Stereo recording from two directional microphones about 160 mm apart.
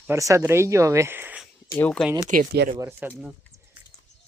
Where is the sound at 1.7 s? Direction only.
10° left (ahead or behind).